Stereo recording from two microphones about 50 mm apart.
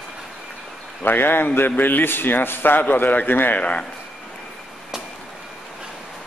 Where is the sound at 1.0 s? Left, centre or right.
Left.